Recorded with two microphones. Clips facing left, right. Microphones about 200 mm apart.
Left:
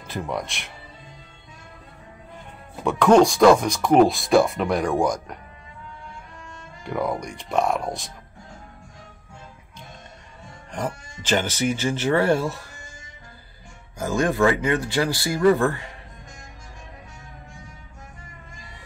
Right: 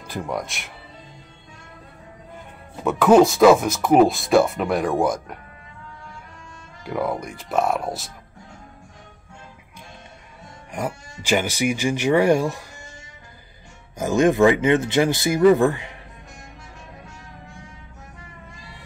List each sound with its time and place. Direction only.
0.0 s speech: centre (ahead or behind)
2.8 s speech: 5° right (ahead or behind)
6.8 s speech: 5° right (ahead or behind)
10.7 s speech: 10° right (ahead or behind)
13.9 s speech: 20° right (ahead or behind)